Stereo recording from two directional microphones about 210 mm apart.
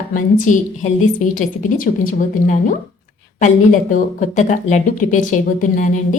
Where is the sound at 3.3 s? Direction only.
40° left (ahead or behind).